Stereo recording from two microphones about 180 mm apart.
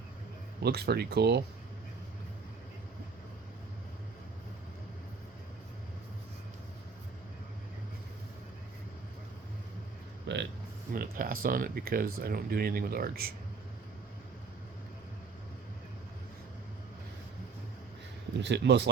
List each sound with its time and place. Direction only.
0.6 s speech: 65° right (ahead or behind)
10.3 s a sound: 75° right (ahead or behind)
10.9 s speech: 55° right (ahead or behind)
18.3 s speech: 75° right (ahead or behind)